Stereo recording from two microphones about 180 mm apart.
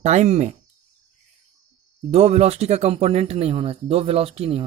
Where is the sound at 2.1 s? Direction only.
35° right (ahead or behind).